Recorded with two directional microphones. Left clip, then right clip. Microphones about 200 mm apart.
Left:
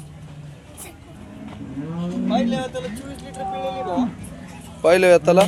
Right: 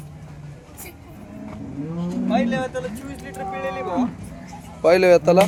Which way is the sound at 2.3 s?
Centre (ahead or behind).